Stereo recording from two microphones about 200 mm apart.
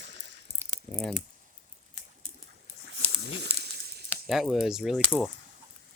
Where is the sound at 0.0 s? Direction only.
60° right (ahead or behind).